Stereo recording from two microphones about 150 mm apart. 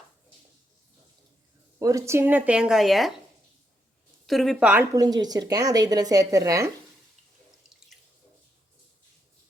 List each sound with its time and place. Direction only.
1.8 s speech: 20° right (ahead or behind); by 3.1 s centre (ahead or behind)
4.3 s a woman's voice: centre (ahead or behind)
4.9 s speech: 25° right (ahead or behind)